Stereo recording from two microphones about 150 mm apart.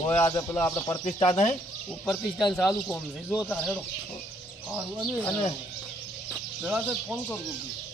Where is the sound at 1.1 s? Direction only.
45° left (ahead or behind).